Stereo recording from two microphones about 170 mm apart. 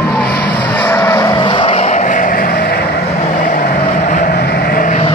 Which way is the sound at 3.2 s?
45° left (ahead or behind).